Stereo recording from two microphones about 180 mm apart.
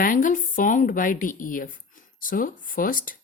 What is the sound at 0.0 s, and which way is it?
Speech, 50° left (ahead or behind).